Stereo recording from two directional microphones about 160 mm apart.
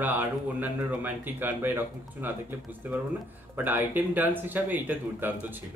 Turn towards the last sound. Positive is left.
turn(degrees=-10)  # may be behind; listen again after turning